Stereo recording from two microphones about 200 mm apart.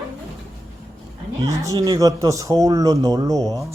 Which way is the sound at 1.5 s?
15° right (ahead or behind).